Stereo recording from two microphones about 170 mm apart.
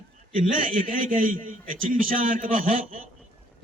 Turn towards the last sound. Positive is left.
turn(degrees=-50)  # may be behind; listen again after turning